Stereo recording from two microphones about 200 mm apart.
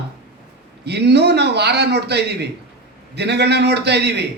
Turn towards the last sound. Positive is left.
turn(degrees=-55)  # may be behind; listen again after turning